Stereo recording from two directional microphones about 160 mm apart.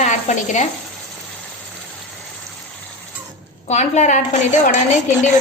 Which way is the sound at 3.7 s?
45° left (ahead or behind).